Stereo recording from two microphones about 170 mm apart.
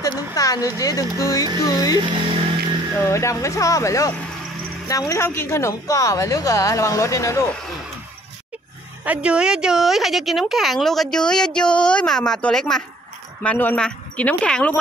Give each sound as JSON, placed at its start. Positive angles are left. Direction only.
{"t": 0.0, "sound": "speech", "side_deg": 20}
{"t": 3.1, "sound": "speech", "side_deg": 15}
{"t": 9.0, "sound": "a woman's voice", "side_deg": -5}